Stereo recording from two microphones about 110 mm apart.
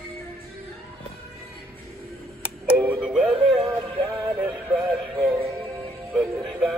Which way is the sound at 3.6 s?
25° right (ahead or behind).